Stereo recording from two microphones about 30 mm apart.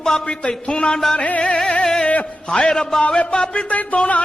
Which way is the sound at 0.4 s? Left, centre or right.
Left.